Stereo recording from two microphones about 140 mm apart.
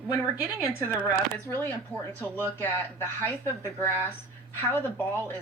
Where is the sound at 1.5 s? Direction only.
10° left (ahead or behind).